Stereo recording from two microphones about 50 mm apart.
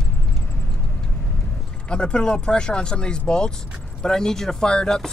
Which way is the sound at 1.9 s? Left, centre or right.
Centre.